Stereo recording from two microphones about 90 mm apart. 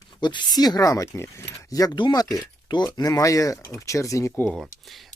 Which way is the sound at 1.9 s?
60° left (ahead or behind).